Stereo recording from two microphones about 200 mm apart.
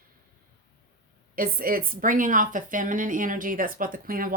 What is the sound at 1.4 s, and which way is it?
A woman's voice, 45° right (ahead or behind).